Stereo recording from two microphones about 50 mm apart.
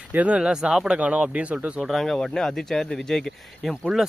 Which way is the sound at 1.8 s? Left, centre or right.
Centre.